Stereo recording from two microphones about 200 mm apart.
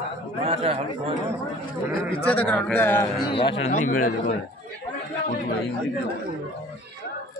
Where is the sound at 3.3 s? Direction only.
25° left (ahead or behind).